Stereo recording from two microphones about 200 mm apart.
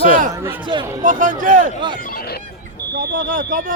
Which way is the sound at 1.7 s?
25° right (ahead or behind).